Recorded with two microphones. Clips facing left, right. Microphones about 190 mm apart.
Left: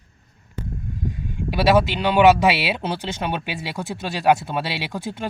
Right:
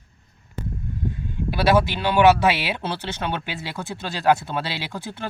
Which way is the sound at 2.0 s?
15° left (ahead or behind).